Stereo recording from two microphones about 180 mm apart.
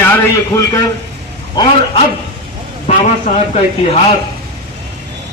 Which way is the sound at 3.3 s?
45° left (ahead or behind).